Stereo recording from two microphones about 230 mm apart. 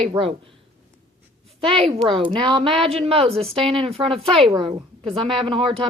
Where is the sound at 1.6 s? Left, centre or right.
Right.